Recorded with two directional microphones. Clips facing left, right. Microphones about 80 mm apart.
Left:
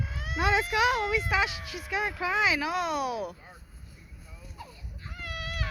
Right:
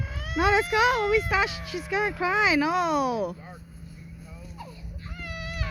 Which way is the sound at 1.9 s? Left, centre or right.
Centre.